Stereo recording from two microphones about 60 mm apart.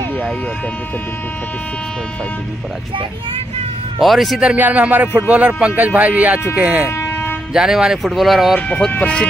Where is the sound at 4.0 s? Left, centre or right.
Centre.